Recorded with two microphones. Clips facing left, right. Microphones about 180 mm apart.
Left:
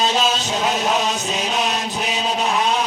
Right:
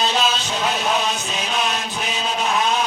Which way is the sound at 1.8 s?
40° left (ahead or behind).